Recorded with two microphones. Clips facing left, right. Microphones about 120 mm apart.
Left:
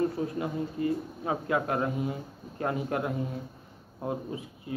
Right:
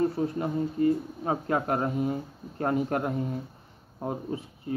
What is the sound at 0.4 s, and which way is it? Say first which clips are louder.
A man's voice: right 5 dB; 40° right (ahead or behind).